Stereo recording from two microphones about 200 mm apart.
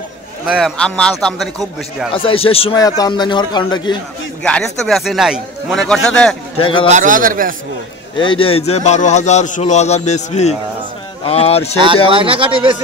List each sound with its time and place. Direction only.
0.5 s speech: centre (ahead or behind)
2.1 s a man's voice: 25° left (ahead or behind)
4.4 s speech: 5° left (ahead or behind)
6.6 s a man's voice: 25° left (ahead or behind)
6.9 s speech: 40° right (ahead or behind)
8.2 s a man's voice: 25° left (ahead or behind)
12.1 s speech: 25° right (ahead or behind)